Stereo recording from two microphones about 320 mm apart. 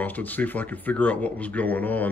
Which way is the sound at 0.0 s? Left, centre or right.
Centre.